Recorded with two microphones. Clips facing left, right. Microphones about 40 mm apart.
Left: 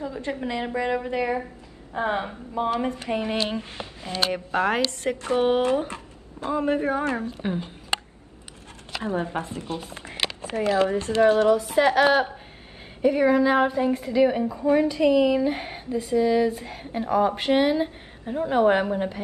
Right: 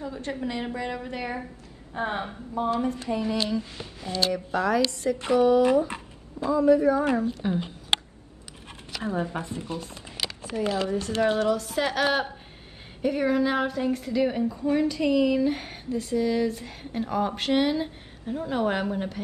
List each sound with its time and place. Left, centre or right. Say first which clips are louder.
0.2 s speech: left 2 dB; left
9.1 s speech: left 2 dB; left
9.5 s speech: left 1 dB; left
11.7 s a woman's voice: left 6 dB; left
13.0 s speech: left 5 dB; centre
13.6 s a woman's voice: left 4 dB; left